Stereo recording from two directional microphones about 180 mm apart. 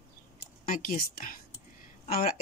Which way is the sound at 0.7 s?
50° left (ahead or behind).